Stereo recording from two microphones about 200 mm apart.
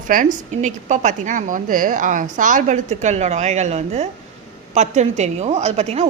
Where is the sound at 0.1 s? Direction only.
40° right (ahead or behind).